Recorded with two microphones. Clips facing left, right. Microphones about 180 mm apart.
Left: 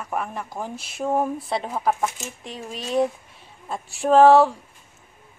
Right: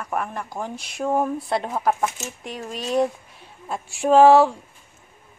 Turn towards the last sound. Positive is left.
turn(degrees=0)  # may be behind; listen again after turning